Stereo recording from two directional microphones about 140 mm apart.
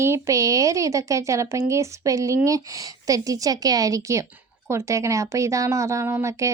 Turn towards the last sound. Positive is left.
turn(degrees=-20)  # may be behind; listen again after turning